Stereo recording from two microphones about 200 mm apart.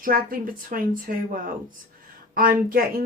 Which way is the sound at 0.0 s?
45° right (ahead or behind).